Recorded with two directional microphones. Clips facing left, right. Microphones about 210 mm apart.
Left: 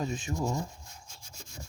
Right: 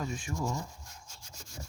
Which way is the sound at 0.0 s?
20° left (ahead or behind).